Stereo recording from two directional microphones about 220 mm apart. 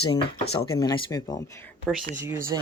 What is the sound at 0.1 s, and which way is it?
Speech, 25° left (ahead or behind).